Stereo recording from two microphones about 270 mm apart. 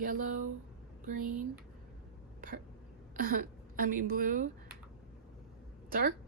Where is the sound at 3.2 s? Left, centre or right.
Right.